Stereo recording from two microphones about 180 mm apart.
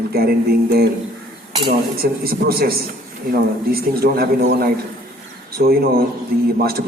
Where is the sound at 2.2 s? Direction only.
55° right (ahead or behind).